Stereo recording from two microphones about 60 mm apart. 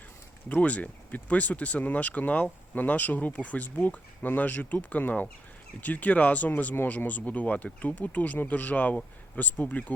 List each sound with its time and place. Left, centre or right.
0.4 s speech: left